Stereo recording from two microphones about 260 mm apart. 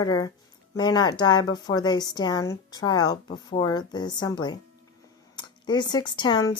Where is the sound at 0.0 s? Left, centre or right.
Centre.